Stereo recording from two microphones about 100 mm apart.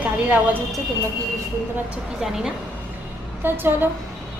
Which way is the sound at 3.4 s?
20° right (ahead or behind).